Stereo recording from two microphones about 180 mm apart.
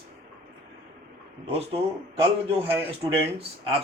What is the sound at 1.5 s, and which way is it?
Speech, 35° right (ahead or behind).